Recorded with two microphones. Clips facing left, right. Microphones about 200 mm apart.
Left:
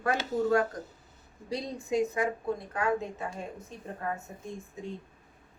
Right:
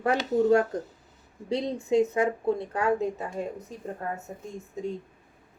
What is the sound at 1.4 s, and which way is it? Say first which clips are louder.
Speech: right 6 dB; 25° right (ahead or behind).